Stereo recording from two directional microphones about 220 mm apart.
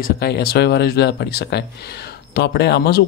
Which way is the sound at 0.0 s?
45° left (ahead or behind).